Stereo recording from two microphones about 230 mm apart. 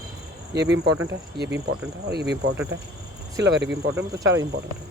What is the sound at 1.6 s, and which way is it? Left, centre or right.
Speech, right.